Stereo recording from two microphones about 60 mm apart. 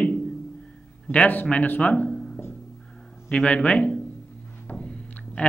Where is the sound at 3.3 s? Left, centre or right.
Centre.